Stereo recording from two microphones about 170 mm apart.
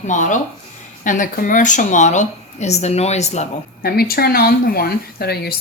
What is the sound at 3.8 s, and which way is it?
Speech, 65° left (ahead or behind).